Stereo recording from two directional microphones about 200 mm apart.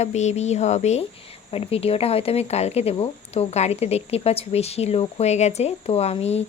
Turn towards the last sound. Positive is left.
turn(degrees=30)  # may be behind; listen again after turning